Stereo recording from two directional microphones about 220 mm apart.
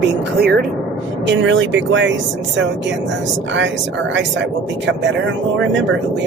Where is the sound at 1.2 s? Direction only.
55° right (ahead or behind).